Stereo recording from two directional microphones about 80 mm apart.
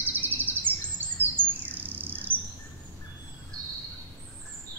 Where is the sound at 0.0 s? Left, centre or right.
Right.